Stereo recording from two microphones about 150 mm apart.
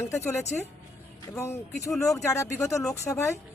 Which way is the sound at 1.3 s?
15° left (ahead or behind).